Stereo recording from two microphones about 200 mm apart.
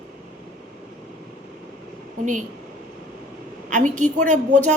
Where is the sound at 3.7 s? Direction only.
40° right (ahead or behind).